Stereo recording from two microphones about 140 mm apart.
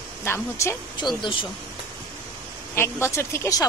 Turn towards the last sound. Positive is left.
turn(degrees=20)  # may be behind; listen again after turning